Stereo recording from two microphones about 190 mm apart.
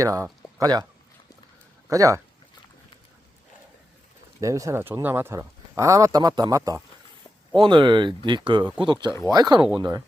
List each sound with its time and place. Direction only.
0.0 s speech: 15° right (ahead or behind)
1.9 s speech: 15° right (ahead or behind)
4.4 s speech: 15° right (ahead or behind)